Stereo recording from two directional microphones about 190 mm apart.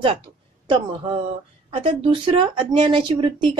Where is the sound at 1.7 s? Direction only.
30° right (ahead or behind).